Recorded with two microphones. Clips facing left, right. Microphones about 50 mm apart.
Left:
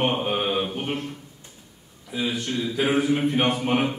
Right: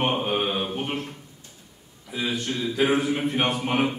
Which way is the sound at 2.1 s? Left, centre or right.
Centre.